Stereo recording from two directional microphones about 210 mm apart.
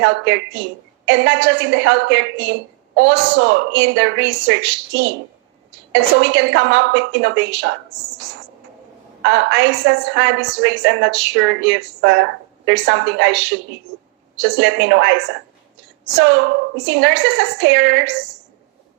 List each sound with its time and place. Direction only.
0.0 s a woman's voice: 55° right (ahead or behind)
9.2 s a woman's voice: 60° right (ahead or behind)